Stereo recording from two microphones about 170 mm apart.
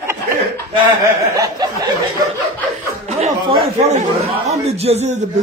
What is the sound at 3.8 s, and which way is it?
Speech, 40° right (ahead or behind).